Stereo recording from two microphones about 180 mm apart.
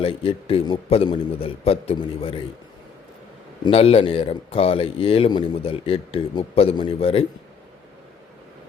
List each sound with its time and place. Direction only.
0.0 s speech: 30° left (ahead or behind)
3.6 s speech: 30° left (ahead or behind)